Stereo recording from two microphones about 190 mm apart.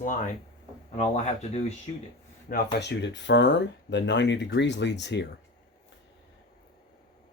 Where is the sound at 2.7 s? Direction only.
65° left (ahead or behind).